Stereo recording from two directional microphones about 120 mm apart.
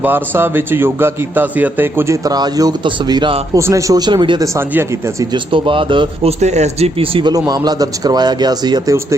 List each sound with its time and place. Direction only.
0.0 s a man's voice: 15° right (ahead or behind)
2.2 s a man's voice: 30° right (ahead or behind)
3.5 s speech: 25° right (ahead or behind)
4.5 s speech: 20° right (ahead or behind)
5.2 s speech: 40° right (ahead or behind)
6.4 s speech: 70° right (ahead or behind); by 7.3 s 45° right (ahead or behind)
7.3 s a man's voice: 30° right (ahead or behind)